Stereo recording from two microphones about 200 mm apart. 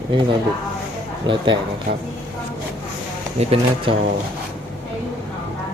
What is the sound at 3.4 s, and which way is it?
Speech, 30° right (ahead or behind).